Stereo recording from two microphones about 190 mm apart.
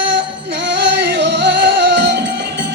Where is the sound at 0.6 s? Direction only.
65° right (ahead or behind).